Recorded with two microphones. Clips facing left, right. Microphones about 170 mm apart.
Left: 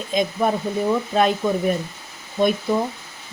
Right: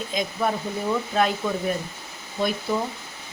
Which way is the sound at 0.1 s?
20° left (ahead or behind).